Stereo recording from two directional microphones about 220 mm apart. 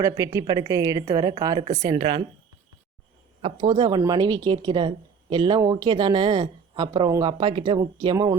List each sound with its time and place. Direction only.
0.0 s a woman's voice: 15° right (ahead or behind)
3.4 s speech: 20° right (ahead or behind)